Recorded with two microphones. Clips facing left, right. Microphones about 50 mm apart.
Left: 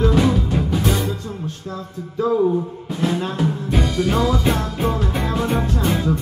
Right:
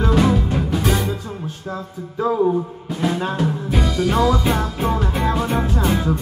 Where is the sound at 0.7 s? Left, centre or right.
Centre.